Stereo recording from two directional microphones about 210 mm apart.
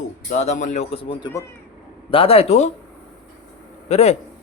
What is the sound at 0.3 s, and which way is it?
Speech, 35° left (ahead or behind).